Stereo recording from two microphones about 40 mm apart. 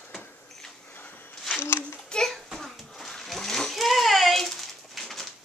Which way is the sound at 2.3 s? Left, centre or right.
Centre.